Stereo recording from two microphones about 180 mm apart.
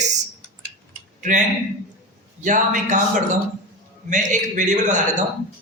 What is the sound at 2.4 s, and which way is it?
Speech, 45° right (ahead or behind).